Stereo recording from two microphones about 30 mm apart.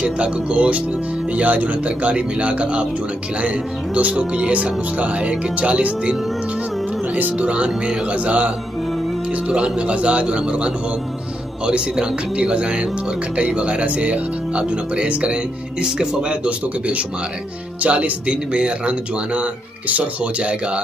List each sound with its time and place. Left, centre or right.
0.0 s speech: right
7.3 s speech: right
9.5 s a man's voice: right
15.8 s speech: right
16.4 s speech: right